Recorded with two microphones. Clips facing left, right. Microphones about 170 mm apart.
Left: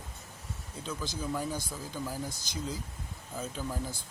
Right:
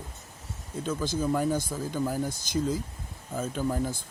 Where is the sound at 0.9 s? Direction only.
50° right (ahead or behind).